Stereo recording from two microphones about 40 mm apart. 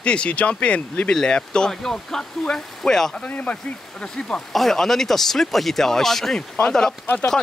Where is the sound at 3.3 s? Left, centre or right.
Left.